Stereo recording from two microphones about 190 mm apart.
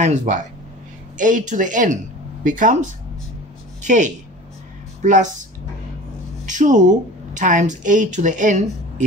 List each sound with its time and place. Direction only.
0.0 s speech: 40° right (ahead or behind)
6.4 s speech: 40° right (ahead or behind)